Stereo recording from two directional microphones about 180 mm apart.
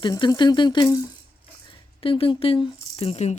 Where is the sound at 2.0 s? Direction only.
30° left (ahead or behind).